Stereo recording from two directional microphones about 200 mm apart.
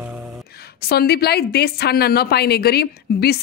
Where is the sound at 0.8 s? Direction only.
50° left (ahead or behind).